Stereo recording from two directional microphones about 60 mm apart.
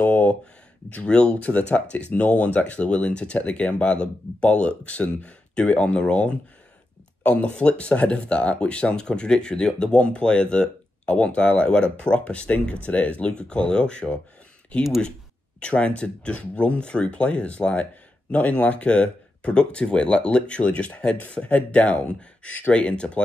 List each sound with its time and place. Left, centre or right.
0.0 s a sound: left
0.9 s speech: centre
15.6 s speech: centre